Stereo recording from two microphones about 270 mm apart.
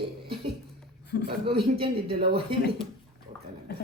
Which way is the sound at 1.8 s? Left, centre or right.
Centre.